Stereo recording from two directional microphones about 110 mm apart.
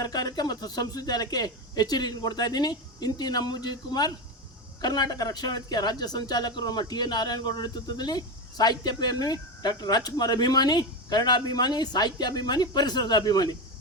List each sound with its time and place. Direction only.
0.0 s speech: 35° left (ahead or behind)